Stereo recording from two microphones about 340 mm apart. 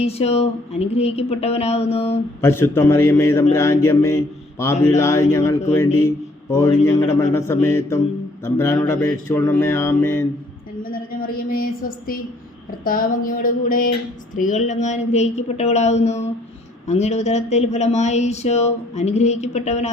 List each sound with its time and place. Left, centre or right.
0.0 s a man's voice: centre
2.4 s a man's voice: centre
10.8 s a sound: left
12.8 s speech: left